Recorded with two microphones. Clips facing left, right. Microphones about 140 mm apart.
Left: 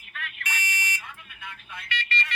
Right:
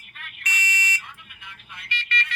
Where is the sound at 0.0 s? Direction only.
90° left.